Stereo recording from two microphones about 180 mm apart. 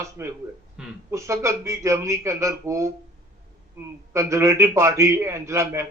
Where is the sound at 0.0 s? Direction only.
15° right (ahead or behind).